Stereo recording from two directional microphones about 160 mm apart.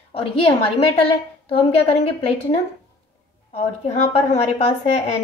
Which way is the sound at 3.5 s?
40° left (ahead or behind).